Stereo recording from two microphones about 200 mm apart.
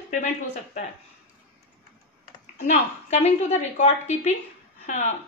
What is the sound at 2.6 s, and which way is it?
Speech, 35° left (ahead or behind).